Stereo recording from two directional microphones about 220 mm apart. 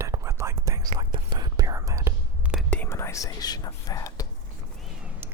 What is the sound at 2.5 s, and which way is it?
Whispering, 5° left (ahead or behind).